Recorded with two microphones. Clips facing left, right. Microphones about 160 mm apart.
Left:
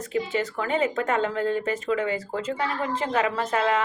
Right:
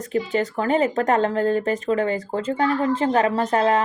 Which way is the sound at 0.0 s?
35° right (ahead or behind).